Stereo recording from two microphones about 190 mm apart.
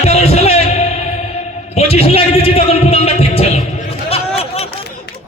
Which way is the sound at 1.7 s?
35° left (ahead or behind).